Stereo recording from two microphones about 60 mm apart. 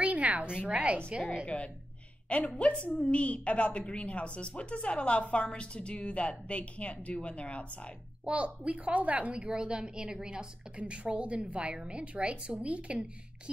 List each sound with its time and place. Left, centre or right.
0.0 s a sound: right
0.7 s a woman's voice: centre
2.2 s speech: left
8.3 s a woman's voice: right